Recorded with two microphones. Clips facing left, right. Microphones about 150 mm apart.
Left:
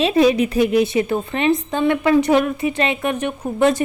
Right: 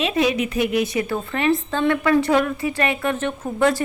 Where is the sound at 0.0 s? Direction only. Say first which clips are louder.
Left 5 dB; 35° left (ahead or behind).